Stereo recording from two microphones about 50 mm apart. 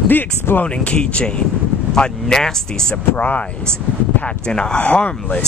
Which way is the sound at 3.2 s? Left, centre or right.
Left.